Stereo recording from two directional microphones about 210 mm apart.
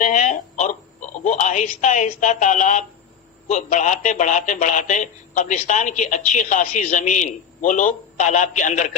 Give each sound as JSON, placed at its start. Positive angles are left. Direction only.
{"t": 0.0, "sound": "telephone", "side_deg": 35}
{"t": 3.5, "sound": "speech", "side_deg": 35}